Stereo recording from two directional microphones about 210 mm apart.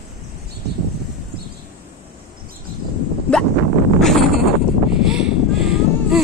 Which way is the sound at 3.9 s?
Centre (ahead or behind).